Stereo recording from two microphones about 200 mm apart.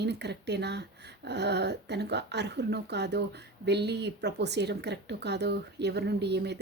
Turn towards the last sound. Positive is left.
turn(degrees=-60)  # may be behind; listen again after turning